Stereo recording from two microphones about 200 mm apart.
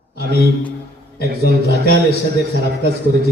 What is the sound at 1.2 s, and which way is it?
Speech, 55° right (ahead or behind).